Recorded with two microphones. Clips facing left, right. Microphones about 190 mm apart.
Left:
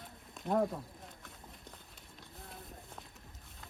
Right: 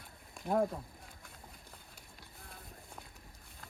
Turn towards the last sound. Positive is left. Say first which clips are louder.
# left 2 dB
turn(degrees=-5)  # may be behind; listen again after turning